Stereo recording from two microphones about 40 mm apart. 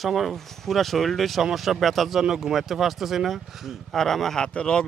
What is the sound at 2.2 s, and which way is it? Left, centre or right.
Speech, centre.